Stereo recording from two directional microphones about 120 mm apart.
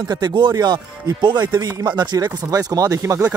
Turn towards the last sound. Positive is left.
turn(degrees=-25)  # may be behind; listen again after turning